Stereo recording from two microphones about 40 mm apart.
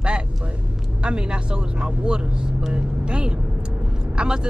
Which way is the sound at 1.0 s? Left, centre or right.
Right.